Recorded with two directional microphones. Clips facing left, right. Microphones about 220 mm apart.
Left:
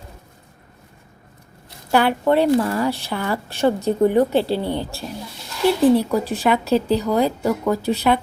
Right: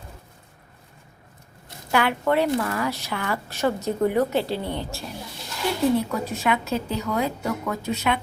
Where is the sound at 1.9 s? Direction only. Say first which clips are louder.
Left 5 dB; 35° left (ahead or behind).